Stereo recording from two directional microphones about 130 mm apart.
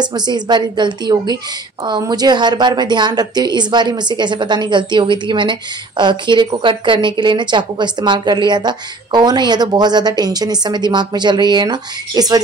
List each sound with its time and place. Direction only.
0.0 s a woman's voice: 35° right (ahead or behind)